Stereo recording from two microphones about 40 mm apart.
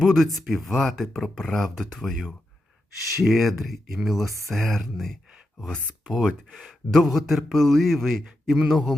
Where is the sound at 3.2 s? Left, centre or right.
Centre.